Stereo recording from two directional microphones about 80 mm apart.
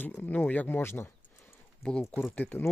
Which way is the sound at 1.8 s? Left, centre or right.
Centre.